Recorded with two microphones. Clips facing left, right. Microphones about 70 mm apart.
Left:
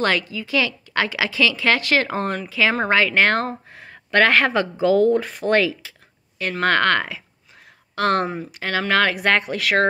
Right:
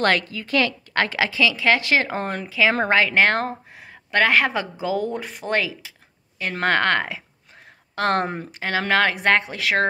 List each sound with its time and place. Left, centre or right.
0.0 s a woman's voice: right
1.3 s speech: centre
2.9 s speech: right
8.3 s speech: right
8.5 s speech: right